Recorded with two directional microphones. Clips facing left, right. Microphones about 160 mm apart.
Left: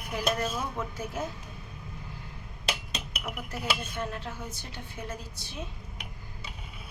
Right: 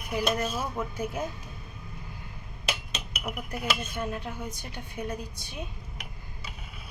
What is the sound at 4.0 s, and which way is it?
Speech, 15° right (ahead or behind).